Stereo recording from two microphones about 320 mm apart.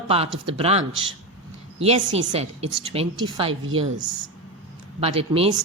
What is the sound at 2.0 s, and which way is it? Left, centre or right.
A woman's voice, centre.